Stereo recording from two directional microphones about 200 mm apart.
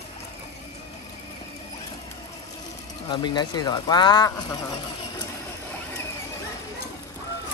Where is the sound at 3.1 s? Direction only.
20° left (ahead or behind).